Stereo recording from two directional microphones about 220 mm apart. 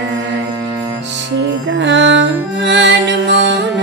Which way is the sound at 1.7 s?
55° right (ahead or behind).